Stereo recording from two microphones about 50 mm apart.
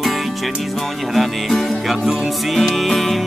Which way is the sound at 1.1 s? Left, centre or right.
Centre.